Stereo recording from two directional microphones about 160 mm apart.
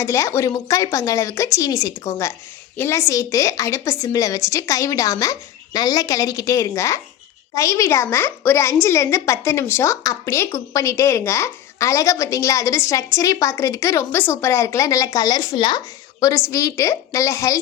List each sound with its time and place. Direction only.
0.0 s a woman's voice: 15° left (ahead or behind)